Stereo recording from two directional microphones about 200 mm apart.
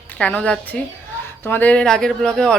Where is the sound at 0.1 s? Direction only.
5° left (ahead or behind).